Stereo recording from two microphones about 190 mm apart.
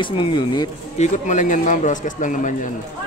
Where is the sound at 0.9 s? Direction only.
40° left (ahead or behind).